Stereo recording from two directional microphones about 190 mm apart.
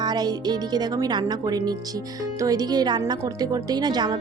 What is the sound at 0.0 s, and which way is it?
Speech, 20° right (ahead or behind).